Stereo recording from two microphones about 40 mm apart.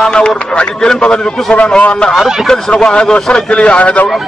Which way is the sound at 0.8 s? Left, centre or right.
Centre.